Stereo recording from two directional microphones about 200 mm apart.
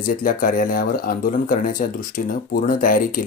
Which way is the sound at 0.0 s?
40° left (ahead or behind).